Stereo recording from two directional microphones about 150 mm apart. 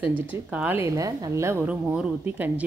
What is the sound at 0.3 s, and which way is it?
A woman's voice, 10° right (ahead or behind).